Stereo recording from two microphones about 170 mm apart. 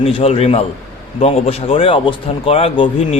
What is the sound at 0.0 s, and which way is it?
Speech, 35° left (ahead or behind).